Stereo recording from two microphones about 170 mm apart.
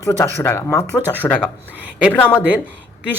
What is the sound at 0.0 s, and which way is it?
A woman's voice, 15° left (ahead or behind).